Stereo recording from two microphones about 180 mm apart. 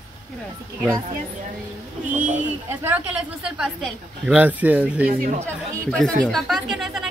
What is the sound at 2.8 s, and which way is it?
Speech, 5° right (ahead or behind).